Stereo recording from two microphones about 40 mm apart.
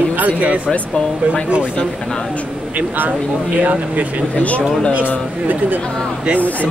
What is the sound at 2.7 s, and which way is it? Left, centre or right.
Speech, right.